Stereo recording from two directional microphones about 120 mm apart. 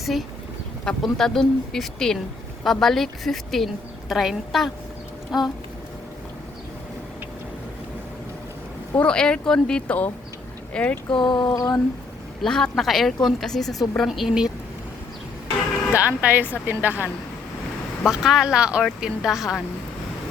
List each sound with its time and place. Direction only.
0.0 s a woman's voice: centre (ahead or behind)
9.0 s speech: 10° left (ahead or behind)
11.1 s a sound: 40° left (ahead or behind)
12.4 s a woman's voice: 5° left (ahead or behind)
16.0 s speech: 10° right (ahead or behind)
18.0 s a woman's voice: centre (ahead or behind)